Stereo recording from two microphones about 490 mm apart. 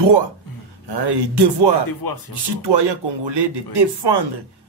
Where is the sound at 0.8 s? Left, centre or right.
Right.